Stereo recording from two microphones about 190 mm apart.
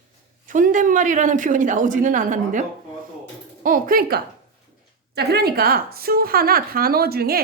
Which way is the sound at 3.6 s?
45° right (ahead or behind).